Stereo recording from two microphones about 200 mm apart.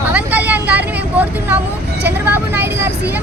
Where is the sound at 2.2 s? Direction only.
10° right (ahead or behind).